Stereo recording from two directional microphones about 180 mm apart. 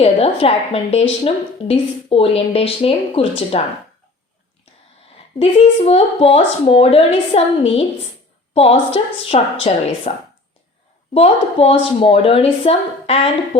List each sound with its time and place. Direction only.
0.0 s a woman's voice: 35° left (ahead or behind)
5.4 s speech: 35° left (ahead or behind)